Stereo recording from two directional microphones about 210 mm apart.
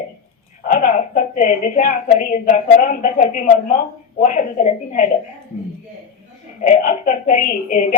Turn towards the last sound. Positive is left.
turn(degrees=40)  # may be behind; listen again after turning